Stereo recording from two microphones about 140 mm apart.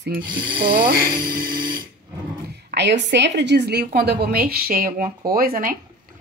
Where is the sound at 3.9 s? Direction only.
90° right.